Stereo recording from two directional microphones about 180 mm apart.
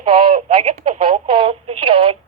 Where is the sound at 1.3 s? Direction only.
30° right (ahead or behind).